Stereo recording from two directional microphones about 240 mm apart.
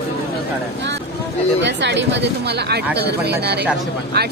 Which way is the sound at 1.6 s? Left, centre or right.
Right.